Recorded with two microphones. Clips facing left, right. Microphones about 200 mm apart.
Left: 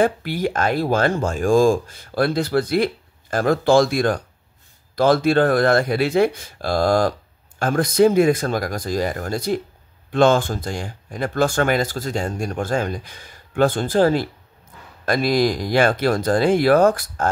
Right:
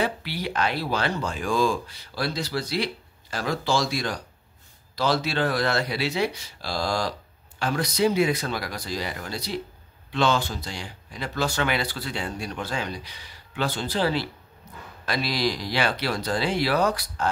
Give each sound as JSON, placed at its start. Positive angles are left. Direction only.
{"t": 0.0, "sound": "speech", "side_deg": 50}